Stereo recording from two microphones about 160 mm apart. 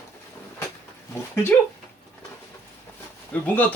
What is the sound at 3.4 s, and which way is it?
Speech, 10° left (ahead or behind).